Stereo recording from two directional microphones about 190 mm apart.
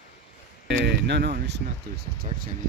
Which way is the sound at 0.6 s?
65° right (ahead or behind).